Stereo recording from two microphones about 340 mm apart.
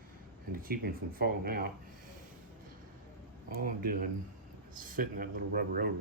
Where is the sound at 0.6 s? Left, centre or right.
Right.